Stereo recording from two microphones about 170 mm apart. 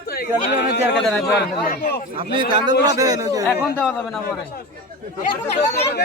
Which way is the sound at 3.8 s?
Centre (ahead or behind).